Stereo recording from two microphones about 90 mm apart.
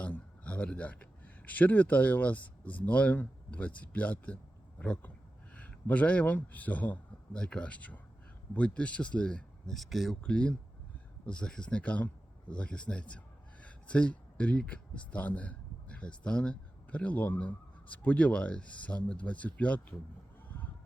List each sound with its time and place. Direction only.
0.0 s a man's voice: 15° left (ahead or behind)